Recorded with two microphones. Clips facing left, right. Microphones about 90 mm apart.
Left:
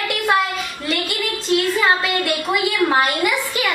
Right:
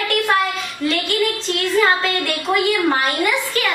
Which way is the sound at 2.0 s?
5° left (ahead or behind).